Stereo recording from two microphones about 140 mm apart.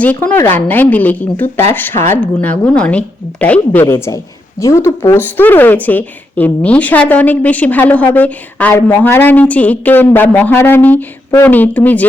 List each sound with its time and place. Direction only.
0.0 s speech: 10° left (ahead or behind)